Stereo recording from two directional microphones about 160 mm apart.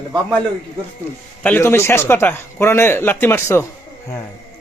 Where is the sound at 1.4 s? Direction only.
10° left (ahead or behind).